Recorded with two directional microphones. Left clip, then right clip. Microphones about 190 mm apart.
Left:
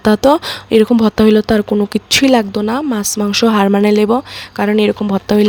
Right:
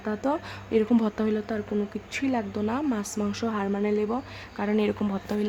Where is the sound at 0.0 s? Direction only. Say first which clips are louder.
Left 18 dB; 50° left (ahead or behind).